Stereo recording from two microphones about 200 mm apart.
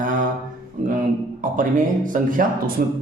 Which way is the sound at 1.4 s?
40° right (ahead or behind).